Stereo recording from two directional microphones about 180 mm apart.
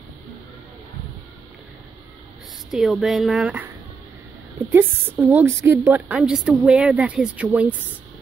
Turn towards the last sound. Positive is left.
turn(degrees=-10)  # may be behind; listen again after turning